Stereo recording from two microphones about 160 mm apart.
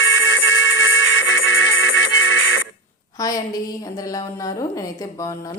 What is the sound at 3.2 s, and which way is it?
A woman's voice, 20° left (ahead or behind).